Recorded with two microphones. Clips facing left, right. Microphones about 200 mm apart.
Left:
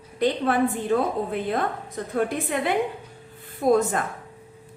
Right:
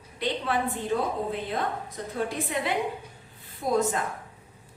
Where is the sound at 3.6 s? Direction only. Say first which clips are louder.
Left 6 dB; 55° left (ahead or behind).